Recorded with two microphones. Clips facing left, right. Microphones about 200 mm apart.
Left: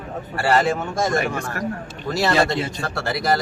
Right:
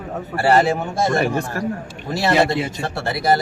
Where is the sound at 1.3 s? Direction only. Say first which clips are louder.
Right 3 dB; 30° right (ahead or behind).